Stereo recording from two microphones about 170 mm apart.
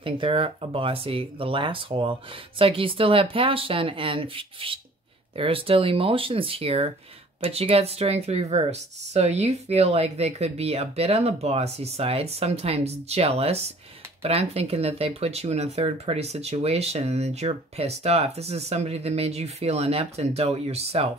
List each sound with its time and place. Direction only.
0.0 s speech: 30° right (ahead or behind)